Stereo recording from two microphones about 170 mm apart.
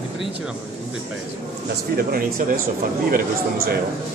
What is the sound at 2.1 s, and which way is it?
Speech, 55° right (ahead or behind).